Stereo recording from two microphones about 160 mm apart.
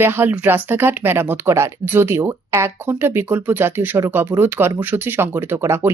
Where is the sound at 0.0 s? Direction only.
15° right (ahead or behind).